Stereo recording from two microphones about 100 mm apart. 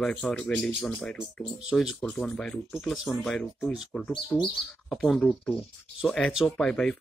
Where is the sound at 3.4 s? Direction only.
10° left (ahead or behind).